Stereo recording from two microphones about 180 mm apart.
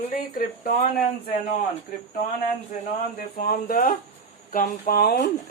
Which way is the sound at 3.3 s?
50° left (ahead or behind).